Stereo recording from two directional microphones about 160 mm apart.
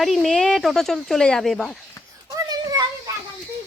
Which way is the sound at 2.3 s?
25° right (ahead or behind).